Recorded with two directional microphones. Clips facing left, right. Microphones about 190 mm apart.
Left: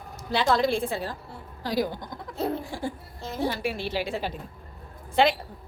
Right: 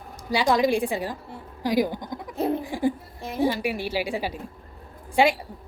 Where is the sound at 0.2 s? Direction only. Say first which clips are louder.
Right 2 dB; 15° right (ahead or behind).